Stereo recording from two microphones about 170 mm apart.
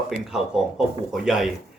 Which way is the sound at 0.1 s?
Centre (ahead or behind).